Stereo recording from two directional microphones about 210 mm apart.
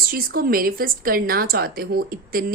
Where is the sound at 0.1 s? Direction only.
45° right (ahead or behind).